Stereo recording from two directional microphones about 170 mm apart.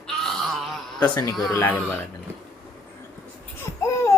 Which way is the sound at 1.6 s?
10° left (ahead or behind).